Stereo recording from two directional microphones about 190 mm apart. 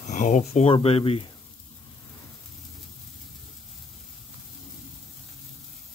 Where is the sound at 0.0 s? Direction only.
40° left (ahead or behind).